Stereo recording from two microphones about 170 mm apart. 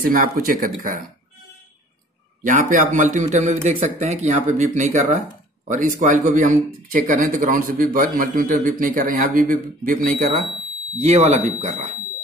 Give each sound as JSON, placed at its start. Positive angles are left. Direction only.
{"t": 0.0, "sound": "speech", "side_deg": -55}
{"t": 2.4, "sound": "speech", "side_deg": -50}
{"t": 11.0, "sound": "speech", "side_deg": -40}